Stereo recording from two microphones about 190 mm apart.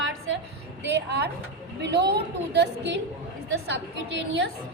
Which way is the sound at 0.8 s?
65° right (ahead or behind).